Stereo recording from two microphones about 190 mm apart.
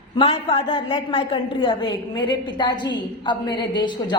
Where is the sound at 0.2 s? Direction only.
30° left (ahead or behind).